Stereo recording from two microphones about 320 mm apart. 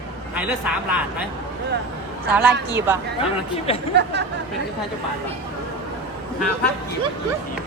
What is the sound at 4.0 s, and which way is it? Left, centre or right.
Speech, right.